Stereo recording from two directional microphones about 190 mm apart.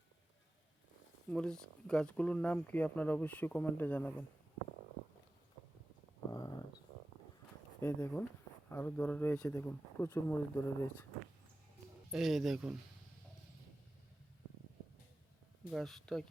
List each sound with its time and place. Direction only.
1.3 s speech: 5° left (ahead or behind)
6.3 s a sound: 20° left (ahead or behind)
7.8 s speech: 10° left (ahead or behind)
12.1 s speech: centre (ahead or behind)
15.7 s speech: centre (ahead or behind)